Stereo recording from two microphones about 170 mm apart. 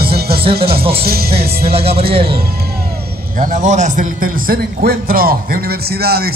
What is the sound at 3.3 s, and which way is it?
A man's voice, 50° right (ahead or behind).